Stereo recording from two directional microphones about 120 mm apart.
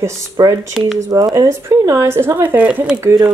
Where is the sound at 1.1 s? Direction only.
30° right (ahead or behind).